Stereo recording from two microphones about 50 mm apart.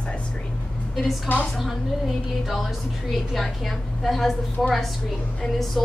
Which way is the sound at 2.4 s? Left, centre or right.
Centre.